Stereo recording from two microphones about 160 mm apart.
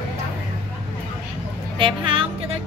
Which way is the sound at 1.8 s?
35° right (ahead or behind).